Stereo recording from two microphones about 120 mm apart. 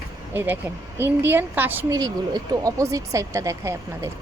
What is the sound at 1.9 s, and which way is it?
A woman's voice, 35° right (ahead or behind).